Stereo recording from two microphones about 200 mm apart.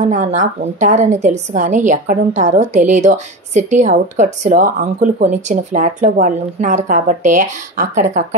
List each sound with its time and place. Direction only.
0.0 s a woman's voice: 35° right (ahead or behind)